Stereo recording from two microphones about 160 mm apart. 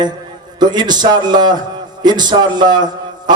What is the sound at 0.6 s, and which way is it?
A man's voice, 25° right (ahead or behind).